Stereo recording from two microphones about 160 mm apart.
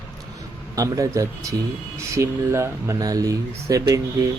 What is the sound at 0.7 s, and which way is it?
Speech, 20° right (ahead or behind).